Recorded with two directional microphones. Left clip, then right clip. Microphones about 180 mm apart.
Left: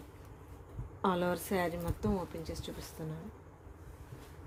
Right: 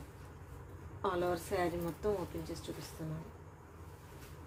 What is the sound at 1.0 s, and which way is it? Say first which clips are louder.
Speech: left 2 dB; 50° left (ahead or behind).